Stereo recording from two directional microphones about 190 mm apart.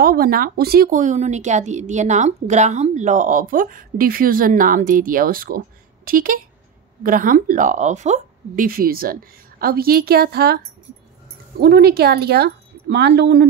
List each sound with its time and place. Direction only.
0.0 s a woman's voice: 50° right (ahead or behind)
11.6 s speech: 55° right (ahead or behind)